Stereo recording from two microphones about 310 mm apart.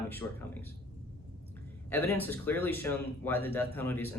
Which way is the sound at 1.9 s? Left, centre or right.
Centre.